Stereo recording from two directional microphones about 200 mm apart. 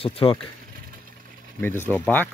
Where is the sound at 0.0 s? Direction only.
30° left (ahead or behind).